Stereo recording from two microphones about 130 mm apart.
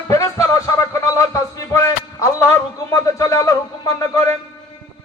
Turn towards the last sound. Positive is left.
turn(degrees=25)  # may be behind; listen again after turning